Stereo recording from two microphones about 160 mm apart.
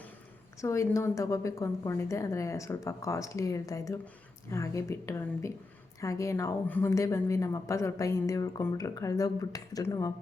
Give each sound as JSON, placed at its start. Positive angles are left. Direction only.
{"t": 0.6, "sound": "a woman's voice", "side_deg": 20}